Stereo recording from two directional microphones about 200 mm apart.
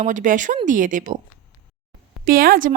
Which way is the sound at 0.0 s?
40° right (ahead or behind).